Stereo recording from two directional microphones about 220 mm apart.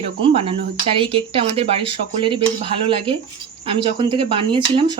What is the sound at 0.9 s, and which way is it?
Speech, 25° right (ahead or behind).